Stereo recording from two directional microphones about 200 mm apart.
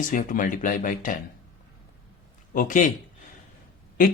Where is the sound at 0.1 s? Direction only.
40° left (ahead or behind).